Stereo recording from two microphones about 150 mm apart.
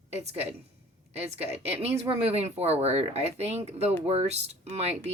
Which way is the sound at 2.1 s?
40° right (ahead or behind).